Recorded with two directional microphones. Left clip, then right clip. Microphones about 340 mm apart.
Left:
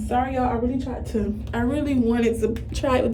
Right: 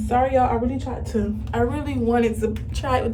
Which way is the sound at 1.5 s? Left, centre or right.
Centre.